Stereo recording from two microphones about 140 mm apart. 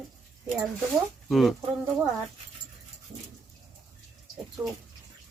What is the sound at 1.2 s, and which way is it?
Speech, centre (ahead or behind).